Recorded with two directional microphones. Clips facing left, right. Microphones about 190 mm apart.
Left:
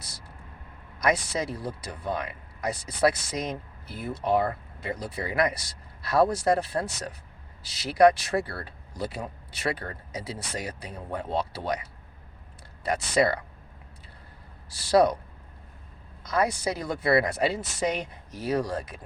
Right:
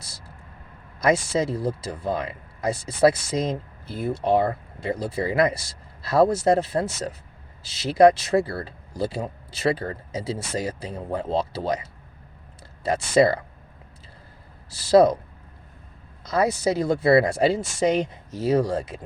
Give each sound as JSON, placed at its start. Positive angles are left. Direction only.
{"t": 0.9, "sound": "speech", "side_deg": -25}
{"t": 14.8, "sound": "speech", "side_deg": -25}
{"t": 16.2, "sound": "speech", "side_deg": -25}